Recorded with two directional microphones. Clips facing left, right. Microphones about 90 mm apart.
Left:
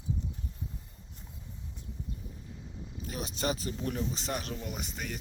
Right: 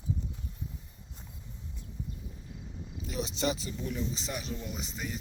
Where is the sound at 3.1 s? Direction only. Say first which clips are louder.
Right 2 dB; 45° left (ahead or behind).